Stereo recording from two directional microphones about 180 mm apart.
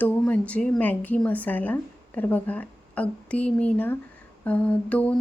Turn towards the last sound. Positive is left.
turn(degrees=5)  # may be behind; listen again after turning